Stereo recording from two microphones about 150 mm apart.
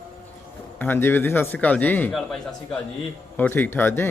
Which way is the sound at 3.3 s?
10° left (ahead or behind).